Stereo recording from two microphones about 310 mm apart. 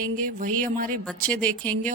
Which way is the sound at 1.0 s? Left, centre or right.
Centre.